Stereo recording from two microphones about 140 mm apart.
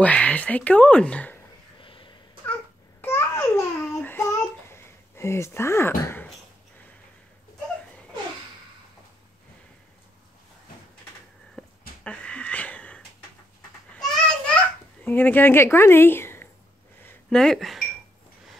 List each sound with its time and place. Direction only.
0.0 s speech: 10° left (ahead or behind)
1.8 s a sound: 35° left (ahead or behind)
3.0 s babbling: 15° left (ahead or behind)
11.6 s a sound: 5° left (ahead or behind)
12.0 s wheeze: 10° left (ahead or behind)
13.9 s children playing: 5° left (ahead or behind)
15.0 s speech: 15° left (ahead or behind)
17.3 s speech: 5° left (ahead or behind)